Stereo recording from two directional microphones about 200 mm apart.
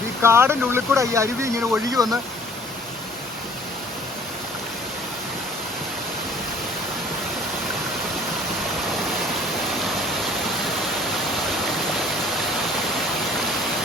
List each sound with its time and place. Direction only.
0.2 s speech: 10° right (ahead or behind)